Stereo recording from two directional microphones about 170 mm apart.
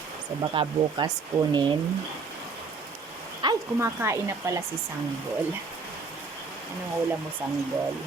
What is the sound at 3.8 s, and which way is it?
Speech, 15° right (ahead or behind).